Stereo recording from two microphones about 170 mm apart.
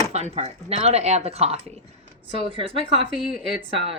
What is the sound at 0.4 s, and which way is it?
Speech, 40° right (ahead or behind).